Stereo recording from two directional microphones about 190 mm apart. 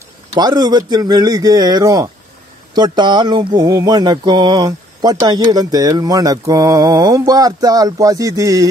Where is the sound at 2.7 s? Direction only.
20° right (ahead or behind).